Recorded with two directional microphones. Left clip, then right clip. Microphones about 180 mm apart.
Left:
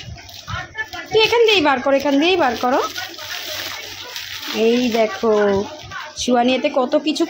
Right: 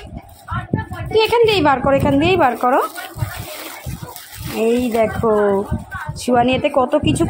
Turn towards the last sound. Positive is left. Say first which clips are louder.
# right 2 dB
turn(degrees=0)  # may be behind; listen again after turning